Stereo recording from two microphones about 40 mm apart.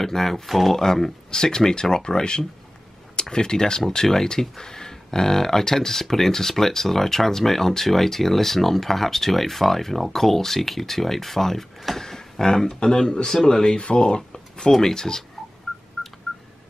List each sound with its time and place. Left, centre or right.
0.0 s speech: centre
15.7 s telephone dialing: centre